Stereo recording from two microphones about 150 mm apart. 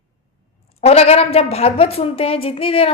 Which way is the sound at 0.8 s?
40° left (ahead or behind).